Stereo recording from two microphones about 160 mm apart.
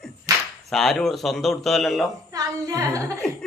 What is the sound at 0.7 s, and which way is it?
Speech, centre (ahead or behind).